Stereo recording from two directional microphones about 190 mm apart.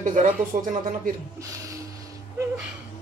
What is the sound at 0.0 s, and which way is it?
Speech, 45° right (ahead or behind).